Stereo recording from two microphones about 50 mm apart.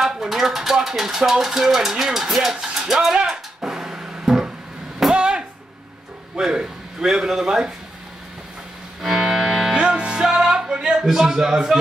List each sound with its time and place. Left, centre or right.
0.0 s speech: centre
3.3 s a sound: centre
6.3 s speech: centre
9.0 s music: centre
9.8 s music: right
10.2 s music: centre
11.1 s a man's voice: centre